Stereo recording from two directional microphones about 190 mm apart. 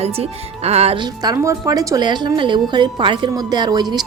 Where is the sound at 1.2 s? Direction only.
15° right (ahead or behind).